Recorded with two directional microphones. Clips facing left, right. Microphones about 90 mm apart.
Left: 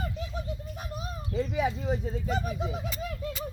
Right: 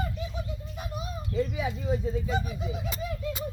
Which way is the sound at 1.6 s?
60° left (ahead or behind).